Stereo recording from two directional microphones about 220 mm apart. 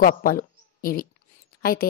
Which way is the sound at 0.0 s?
40° left (ahead or behind).